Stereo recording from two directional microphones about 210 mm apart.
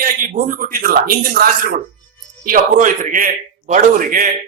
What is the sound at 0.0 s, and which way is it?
A man's voice, 40° right (ahead or behind).